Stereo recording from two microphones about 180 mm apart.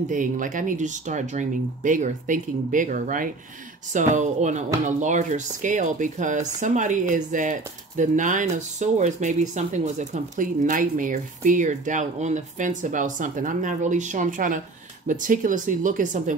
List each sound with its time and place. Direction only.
0.1 s speech: 45° right (ahead or behind)